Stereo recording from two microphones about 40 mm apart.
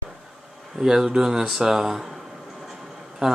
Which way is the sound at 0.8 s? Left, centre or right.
Centre.